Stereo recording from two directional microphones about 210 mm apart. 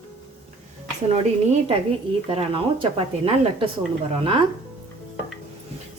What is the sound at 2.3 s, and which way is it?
A woman's voice, 25° right (ahead or behind).